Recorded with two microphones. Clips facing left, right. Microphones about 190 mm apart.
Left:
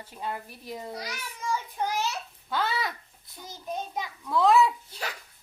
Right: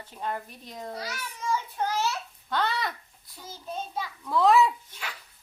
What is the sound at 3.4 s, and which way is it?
Speech, 15° left (ahead or behind).